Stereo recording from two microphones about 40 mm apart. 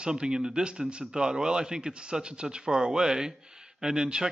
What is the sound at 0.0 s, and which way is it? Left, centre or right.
Speech, centre.